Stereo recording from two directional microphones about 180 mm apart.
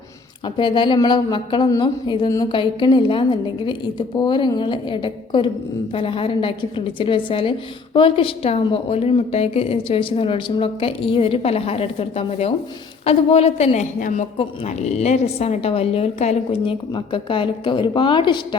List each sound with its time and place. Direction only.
0.5 s a woman's voice: 25° left (ahead or behind)